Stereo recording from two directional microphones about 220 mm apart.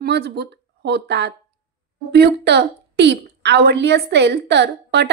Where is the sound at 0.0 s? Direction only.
50° right (ahead or behind).